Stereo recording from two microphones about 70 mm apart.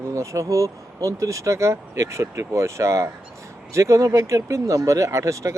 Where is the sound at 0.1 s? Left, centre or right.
Right.